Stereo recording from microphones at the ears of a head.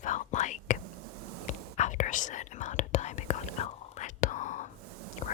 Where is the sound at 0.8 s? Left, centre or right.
Right.